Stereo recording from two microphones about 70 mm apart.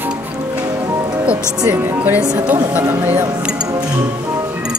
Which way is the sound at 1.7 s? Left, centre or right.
Right.